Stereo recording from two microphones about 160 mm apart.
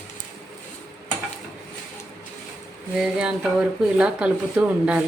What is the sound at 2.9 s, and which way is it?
Speech, 5° right (ahead or behind).